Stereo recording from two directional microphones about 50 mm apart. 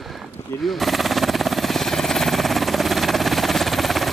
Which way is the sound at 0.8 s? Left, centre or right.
Centre.